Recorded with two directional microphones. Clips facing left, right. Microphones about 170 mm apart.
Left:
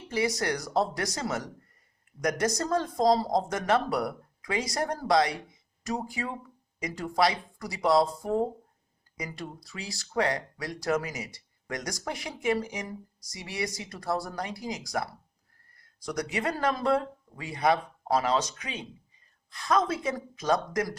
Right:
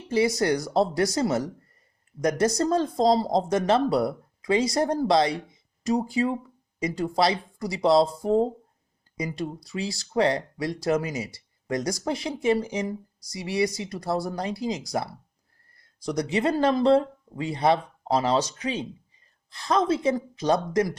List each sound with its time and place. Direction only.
0.1 s speech: 25° right (ahead or behind)